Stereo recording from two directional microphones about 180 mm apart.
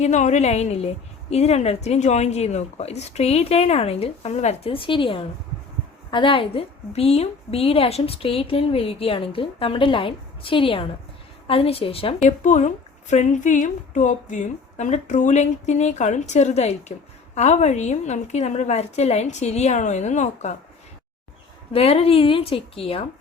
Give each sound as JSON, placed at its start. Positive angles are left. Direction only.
{"t": 0.0, "sound": "a woman's voice", "side_deg": 40}
{"t": 21.7, "sound": "a woman's voice", "side_deg": 35}